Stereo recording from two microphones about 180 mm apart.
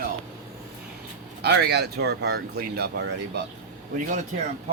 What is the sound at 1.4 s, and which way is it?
Speech, 65° right (ahead or behind).